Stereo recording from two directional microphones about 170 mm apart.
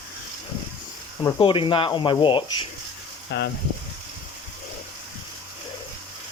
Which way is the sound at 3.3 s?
85° left.